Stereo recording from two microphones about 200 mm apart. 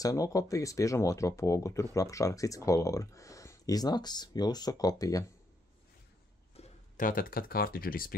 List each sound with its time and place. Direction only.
0.0 s speech: 15° left (ahead or behind)
6.5 s speech: 35° left (ahead or behind)